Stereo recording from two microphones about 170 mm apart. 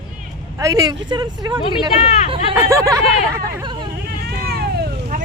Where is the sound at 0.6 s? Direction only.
20° right (ahead or behind).